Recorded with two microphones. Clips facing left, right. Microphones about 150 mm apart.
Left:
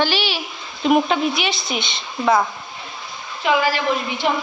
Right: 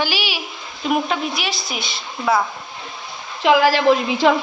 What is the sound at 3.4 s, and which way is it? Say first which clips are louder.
Speech: right 5 dB; 90° right.